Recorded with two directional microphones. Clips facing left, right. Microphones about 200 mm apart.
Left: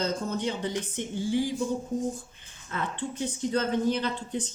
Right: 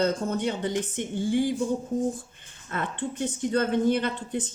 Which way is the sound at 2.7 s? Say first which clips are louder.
Right 2 dB; 55° right (ahead or behind).